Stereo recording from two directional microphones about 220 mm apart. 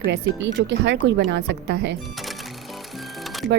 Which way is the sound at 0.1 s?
55° right (ahead or behind).